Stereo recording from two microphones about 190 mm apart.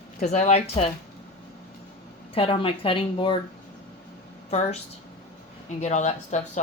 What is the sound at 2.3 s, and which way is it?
Speech, 30° left (ahead or behind).